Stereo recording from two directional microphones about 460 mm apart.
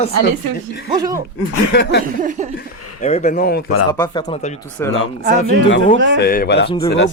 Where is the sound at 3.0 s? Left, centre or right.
Centre.